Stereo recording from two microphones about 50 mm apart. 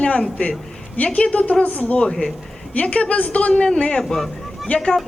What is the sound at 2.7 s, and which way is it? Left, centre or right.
A woman's voice, left.